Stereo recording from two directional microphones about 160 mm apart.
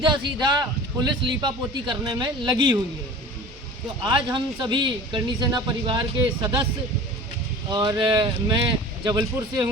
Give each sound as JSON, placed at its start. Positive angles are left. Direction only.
{"t": 0.0, "sound": "a man's voice", "side_deg": -30}
{"t": 4.0, "sound": "a man's voice", "side_deg": -25}
{"t": 7.7, "sound": "a man's voice", "side_deg": -30}